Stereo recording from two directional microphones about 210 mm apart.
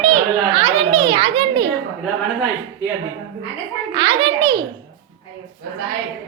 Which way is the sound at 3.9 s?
20° right (ahead or behind).